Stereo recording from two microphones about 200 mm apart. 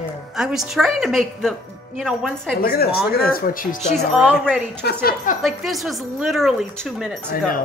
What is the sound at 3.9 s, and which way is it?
Speech, 5° right (ahead or behind).